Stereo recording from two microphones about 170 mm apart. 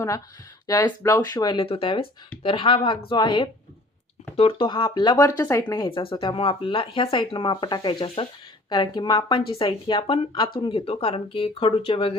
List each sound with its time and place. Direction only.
0.7 s speech: 20° left (ahead or behind)